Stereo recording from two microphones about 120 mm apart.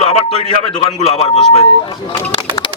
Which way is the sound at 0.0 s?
65° left (ahead or behind).